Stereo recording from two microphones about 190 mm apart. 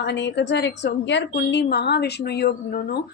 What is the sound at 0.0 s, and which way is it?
Speech, 65° left (ahead or behind).